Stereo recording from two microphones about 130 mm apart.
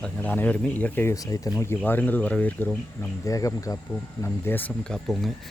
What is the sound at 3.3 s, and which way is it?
Speech, 25° left (ahead or behind).